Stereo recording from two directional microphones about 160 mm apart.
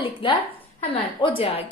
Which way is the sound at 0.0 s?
30° left (ahead or behind).